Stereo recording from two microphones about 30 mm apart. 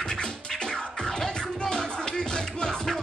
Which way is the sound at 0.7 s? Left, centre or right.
Centre.